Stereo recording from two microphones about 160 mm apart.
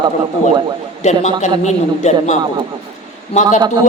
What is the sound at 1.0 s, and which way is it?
A man's voice, 45° left (ahead or behind).